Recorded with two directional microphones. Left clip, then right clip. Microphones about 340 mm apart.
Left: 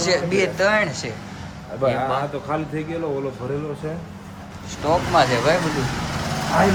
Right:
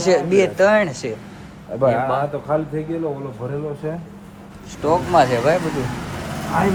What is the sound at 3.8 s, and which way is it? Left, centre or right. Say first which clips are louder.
Speech: right 2 dB; centre.